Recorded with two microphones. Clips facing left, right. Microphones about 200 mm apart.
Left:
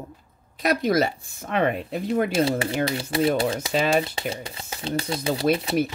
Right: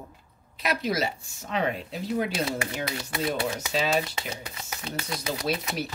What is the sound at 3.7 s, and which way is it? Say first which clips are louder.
Speech: left 4 dB; 55° left (ahead or behind).